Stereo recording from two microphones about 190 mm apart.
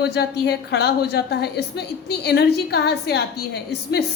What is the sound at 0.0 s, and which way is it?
A woman's voice, 60° left (ahead or behind).